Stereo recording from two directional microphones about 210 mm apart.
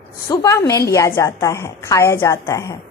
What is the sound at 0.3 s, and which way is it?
A woman's voice, 15° left (ahead or behind).